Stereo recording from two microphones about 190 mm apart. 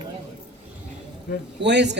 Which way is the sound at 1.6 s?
65° right (ahead or behind).